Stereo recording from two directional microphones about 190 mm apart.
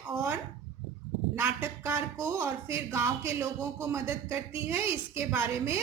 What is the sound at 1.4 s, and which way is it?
Speech, 15° right (ahead or behind).